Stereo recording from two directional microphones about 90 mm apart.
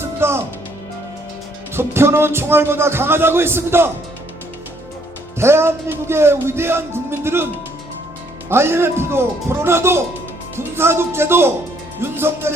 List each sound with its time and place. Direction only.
0.0 s music: 30° right (ahead or behind)
1.7 s speech: 25° right (ahead or behind)
5.4 s speech: 30° right (ahead or behind)
8.4 s speech: 25° right (ahead or behind)